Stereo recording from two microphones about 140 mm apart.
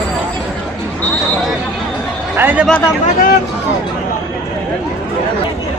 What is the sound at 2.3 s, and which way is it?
Speech, 10° right (ahead or behind).